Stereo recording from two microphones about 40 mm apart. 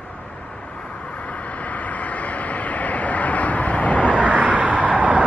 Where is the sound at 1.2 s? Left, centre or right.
Left.